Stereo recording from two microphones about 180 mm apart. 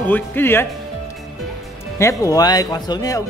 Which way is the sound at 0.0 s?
10° left (ahead or behind).